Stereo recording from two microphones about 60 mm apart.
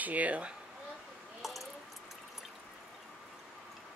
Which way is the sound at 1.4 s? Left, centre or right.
Centre.